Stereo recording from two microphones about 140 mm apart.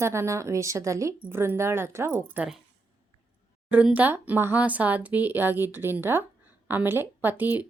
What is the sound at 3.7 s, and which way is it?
Speech, 10° right (ahead or behind).